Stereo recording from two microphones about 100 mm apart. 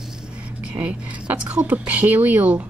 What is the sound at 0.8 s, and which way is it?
Speech, 15° right (ahead or behind).